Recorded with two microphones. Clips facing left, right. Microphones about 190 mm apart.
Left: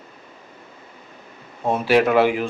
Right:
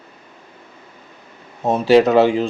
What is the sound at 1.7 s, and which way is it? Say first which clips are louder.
Speech: right 4 dB; 35° right (ahead or behind).